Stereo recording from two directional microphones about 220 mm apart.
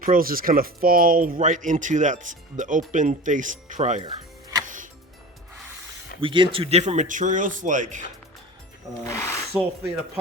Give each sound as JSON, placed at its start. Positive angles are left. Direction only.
{"t": 0.0, "sound": "speech", "side_deg": -40}
{"t": 4.5, "sound": "music", "side_deg": -15}
{"t": 6.1, "sound": "speech", "side_deg": -25}
{"t": 9.0, "sound": "speech", "side_deg": 10}
{"t": 9.5, "sound": "speech", "side_deg": -5}